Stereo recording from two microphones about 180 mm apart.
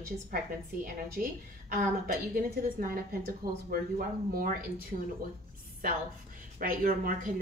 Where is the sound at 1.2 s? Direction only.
50° right (ahead or behind).